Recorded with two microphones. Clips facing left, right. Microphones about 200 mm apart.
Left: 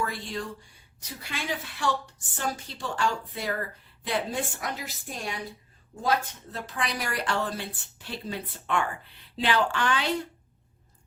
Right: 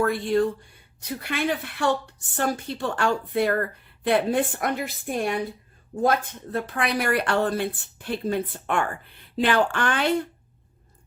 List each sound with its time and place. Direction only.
0.0 s a woman's voice: 55° right (ahead or behind)